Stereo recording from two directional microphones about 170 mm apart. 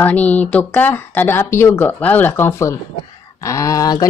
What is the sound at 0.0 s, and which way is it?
Speech, 10° left (ahead or behind).